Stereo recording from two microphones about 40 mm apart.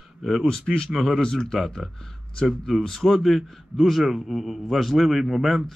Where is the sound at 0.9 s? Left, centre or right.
Centre.